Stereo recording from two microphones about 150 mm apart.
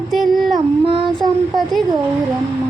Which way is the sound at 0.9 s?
40° right (ahead or behind).